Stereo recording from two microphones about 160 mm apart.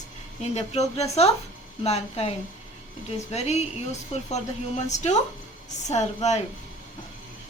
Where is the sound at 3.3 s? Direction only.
45° left (ahead or behind).